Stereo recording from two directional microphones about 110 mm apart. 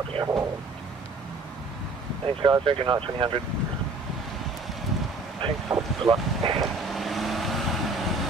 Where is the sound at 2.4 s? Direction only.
45° right (ahead or behind).